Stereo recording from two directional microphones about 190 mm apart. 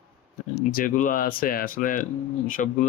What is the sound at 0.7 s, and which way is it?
Speech, 45° left (ahead or behind).